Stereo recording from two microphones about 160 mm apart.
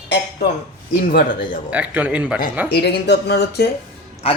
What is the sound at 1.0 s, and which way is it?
Speech, 65° left (ahead or behind).